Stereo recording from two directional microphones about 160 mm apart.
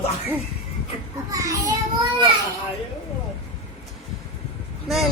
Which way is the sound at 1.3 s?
20° right (ahead or behind).